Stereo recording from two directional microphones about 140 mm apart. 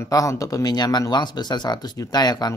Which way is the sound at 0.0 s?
25° left (ahead or behind).